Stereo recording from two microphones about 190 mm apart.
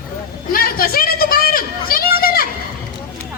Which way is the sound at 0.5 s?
50° left (ahead or behind).